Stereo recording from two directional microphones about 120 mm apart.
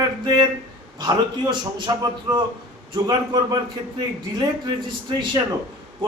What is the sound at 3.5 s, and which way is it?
A man's voice, 35° right (ahead or behind).